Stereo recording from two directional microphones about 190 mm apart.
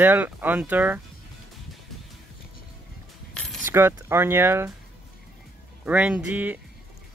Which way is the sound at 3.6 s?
10° right (ahead or behind).